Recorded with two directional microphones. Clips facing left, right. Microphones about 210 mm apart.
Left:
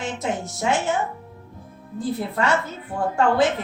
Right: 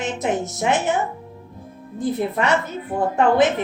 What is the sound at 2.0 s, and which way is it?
A woman's voice, 20° right (ahead or behind).